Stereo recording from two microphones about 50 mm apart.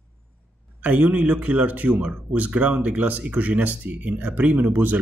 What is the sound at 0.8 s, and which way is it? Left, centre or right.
A man's voice, right.